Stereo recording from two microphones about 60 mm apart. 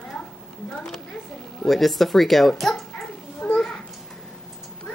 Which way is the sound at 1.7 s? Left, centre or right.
Centre.